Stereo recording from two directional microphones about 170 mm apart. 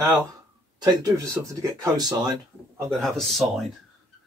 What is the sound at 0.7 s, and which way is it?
Speech, 20° right (ahead or behind).